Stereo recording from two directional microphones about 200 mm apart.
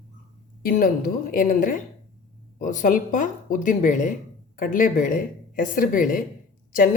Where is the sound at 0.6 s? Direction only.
45° left (ahead or behind).